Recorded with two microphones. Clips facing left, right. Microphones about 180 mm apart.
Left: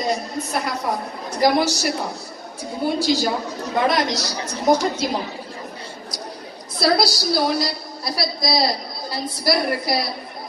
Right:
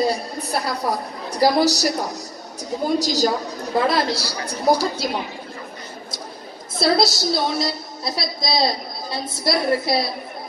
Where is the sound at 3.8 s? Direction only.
30° right (ahead or behind).